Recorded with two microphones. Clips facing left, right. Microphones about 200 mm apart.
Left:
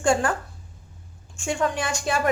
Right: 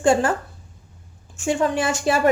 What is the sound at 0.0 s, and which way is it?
Speech, 5° right (ahead or behind).